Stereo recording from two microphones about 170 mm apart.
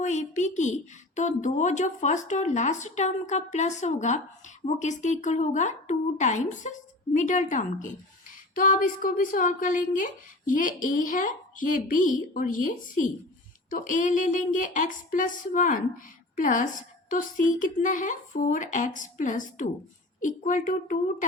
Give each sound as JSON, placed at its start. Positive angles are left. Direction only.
{"t": 0.0, "sound": "a woman's voice", "side_deg": 45}